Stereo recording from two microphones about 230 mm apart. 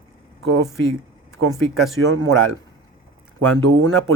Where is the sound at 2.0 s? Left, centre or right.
Right.